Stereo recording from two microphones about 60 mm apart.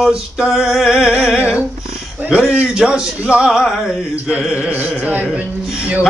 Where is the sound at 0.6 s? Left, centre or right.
Centre; by 1.6 s right.